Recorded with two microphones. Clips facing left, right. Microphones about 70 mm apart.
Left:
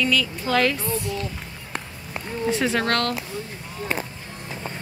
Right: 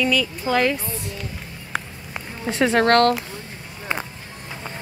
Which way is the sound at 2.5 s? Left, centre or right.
Right.